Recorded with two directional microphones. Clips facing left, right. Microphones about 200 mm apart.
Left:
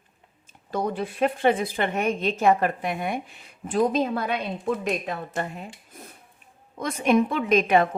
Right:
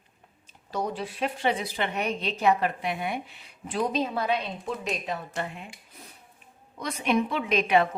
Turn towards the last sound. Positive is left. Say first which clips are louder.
# left 3 dB
turn(degrees=45)  # may be behind; listen again after turning